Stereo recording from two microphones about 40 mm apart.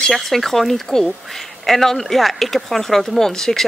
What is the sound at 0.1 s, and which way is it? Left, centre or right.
Speech, centre.